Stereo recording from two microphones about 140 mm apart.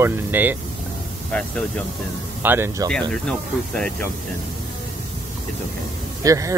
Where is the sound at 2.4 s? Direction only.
15° right (ahead or behind).